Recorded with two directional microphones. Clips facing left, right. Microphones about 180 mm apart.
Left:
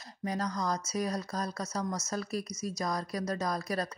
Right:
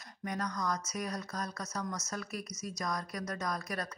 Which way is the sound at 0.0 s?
30° left (ahead or behind).